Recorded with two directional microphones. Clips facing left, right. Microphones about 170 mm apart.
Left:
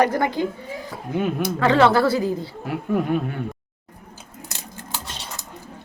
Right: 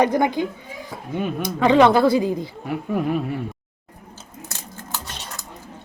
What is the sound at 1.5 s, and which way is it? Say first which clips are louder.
A woman's voice: right 2 dB; 15° right (ahead or behind).